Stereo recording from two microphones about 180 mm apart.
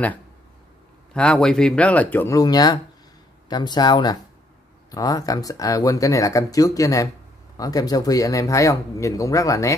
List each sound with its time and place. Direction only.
1.1 s speech: 5° left (ahead or behind)